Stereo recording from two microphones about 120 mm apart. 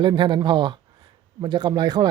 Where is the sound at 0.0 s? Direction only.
40° right (ahead or behind).